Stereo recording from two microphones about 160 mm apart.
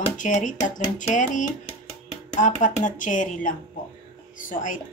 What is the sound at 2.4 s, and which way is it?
A woman's voice, 50° left (ahead or behind).